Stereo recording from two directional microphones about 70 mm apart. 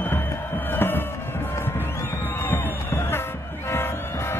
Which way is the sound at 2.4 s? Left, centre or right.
Left.